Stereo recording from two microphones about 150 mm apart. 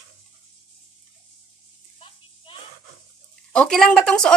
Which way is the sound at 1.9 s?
40° left (ahead or behind).